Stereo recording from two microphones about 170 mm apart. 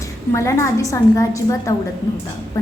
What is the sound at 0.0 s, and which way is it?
A woman's voice, 15° left (ahead or behind).